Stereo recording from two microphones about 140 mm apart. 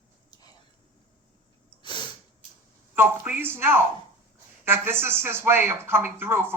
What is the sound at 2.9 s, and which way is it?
Speech, 15° right (ahead or behind).